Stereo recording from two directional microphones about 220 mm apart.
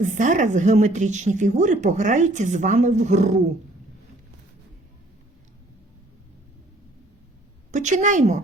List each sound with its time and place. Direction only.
0.0 s speech: 35° right (ahead or behind)
7.7 s speech: 35° right (ahead or behind)